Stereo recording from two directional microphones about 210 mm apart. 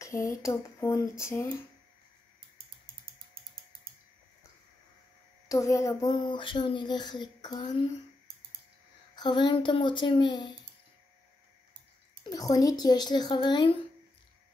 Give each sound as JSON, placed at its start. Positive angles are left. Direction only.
{"t": 0.0, "sound": "speech", "side_deg": 15}
{"t": 5.5, "sound": "speech", "side_deg": 15}
{"t": 9.1, "sound": "speech", "side_deg": 20}
{"t": 12.2, "sound": "speech", "side_deg": 20}